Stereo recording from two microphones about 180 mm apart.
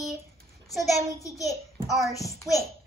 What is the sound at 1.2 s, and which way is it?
Speech, 20° left (ahead or behind).